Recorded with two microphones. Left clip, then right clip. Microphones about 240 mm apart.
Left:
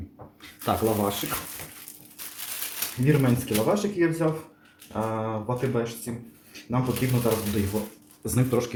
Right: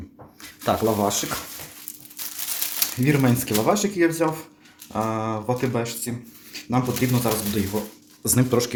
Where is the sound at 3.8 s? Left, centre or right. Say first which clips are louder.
Right 4 dB; right.